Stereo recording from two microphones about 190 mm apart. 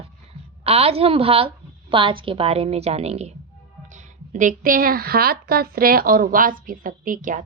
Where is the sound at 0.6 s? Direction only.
30° right (ahead or behind).